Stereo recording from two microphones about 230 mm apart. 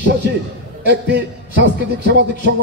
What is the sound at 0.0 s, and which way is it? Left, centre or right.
A man's voice, right.